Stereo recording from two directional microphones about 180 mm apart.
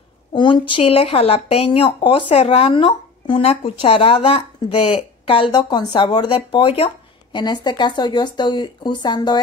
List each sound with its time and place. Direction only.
0.3 s speech: 25° left (ahead or behind)